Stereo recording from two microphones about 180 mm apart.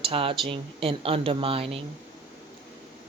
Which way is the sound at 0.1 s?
30° right (ahead or behind).